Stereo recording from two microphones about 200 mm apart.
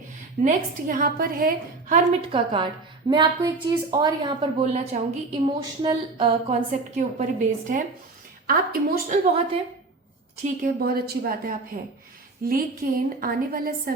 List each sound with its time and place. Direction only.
0.4 s a woman's voice: 45° right (ahead or behind)
2.3 s a woman's voice: 25° right (ahead or behind)
10.4 s a woman's voice: 45° right (ahead or behind)